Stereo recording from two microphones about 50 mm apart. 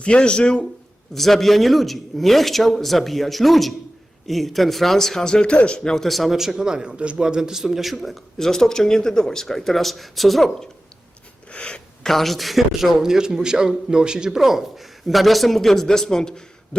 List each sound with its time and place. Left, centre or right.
0.0 s speech: left
1.1 s a man's voice: centre
11.5 s a sound: left
12.0 s a man's voice: centre
13.0 s a man's voice: centre